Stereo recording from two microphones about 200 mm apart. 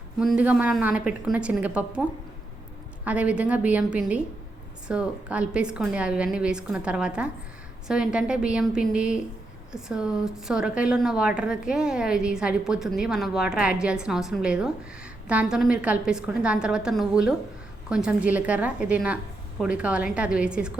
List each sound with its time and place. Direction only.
0.2 s a woman's voice: 5° right (ahead or behind)